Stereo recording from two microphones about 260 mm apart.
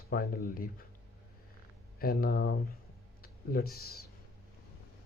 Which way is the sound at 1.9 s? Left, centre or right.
Left.